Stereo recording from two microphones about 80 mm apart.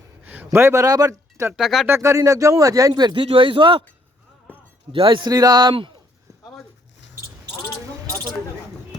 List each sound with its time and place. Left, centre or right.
0.2 s speech: right
1.5 s speech: centre
1.9 s speech: right
2.9 s speech: right
4.9 s a man's voice: right
5.3 s speech: right